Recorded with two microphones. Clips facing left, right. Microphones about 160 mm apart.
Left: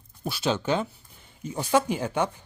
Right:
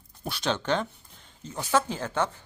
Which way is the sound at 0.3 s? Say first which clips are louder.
Left 2 dB; 5° left (ahead or behind).